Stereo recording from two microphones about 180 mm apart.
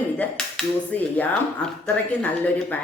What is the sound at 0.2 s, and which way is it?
Speech, 5° left (ahead or behind).